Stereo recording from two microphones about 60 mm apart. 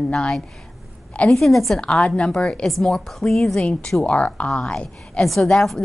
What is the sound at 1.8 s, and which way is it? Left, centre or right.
A woman's voice, centre.